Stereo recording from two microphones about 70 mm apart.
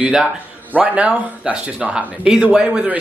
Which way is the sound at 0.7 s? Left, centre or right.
Centre.